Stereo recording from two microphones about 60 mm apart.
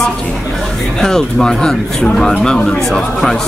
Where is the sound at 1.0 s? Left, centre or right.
Centre.